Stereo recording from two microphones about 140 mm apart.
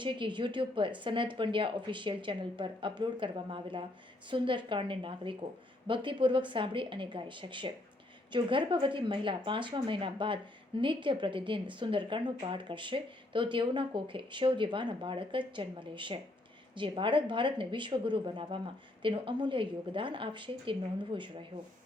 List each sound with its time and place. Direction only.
0.0 s speech: 35° right (ahead or behind)